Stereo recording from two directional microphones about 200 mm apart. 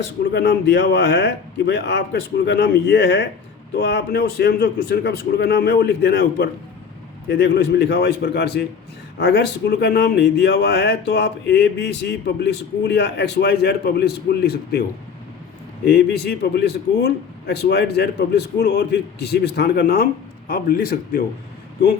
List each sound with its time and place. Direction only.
0.3 s speech: 55° left (ahead or behind)
15.9 s speech: 55° left (ahead or behind)